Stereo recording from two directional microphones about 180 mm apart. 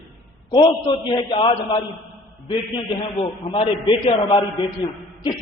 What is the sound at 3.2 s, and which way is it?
A man's voice, 25° left (ahead or behind).